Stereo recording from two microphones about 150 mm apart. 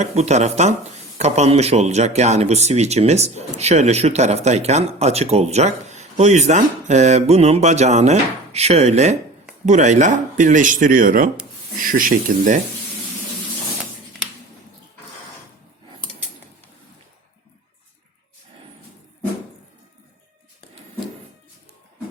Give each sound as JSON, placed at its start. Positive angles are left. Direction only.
{"t": 0.0, "sound": "speech", "side_deg": -50}